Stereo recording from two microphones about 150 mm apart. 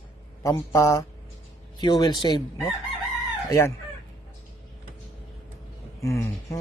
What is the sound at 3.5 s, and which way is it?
Speech, 20° left (ahead or behind).